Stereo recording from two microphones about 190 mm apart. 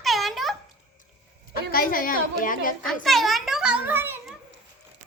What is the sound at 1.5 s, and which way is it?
A woman's voice, 50° left (ahead or behind).